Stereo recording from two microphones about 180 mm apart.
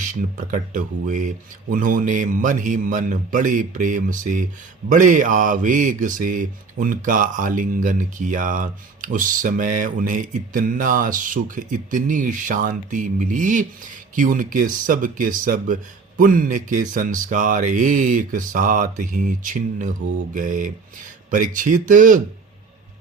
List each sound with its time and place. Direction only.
0.0 s speech: 45° right (ahead or behind)